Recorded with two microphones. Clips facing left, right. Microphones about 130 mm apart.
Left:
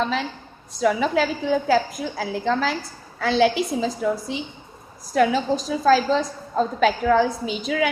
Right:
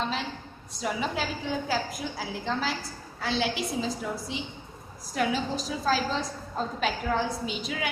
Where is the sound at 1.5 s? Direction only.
55° left (ahead or behind); by 2.7 s 75° left (ahead or behind).